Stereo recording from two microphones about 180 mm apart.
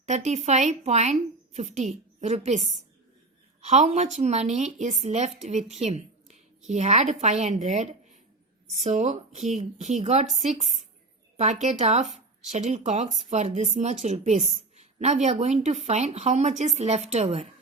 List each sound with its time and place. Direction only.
0.1 s speech: 40° right (ahead or behind)